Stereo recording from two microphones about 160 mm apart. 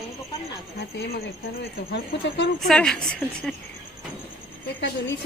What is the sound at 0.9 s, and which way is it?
Speech, 90° left.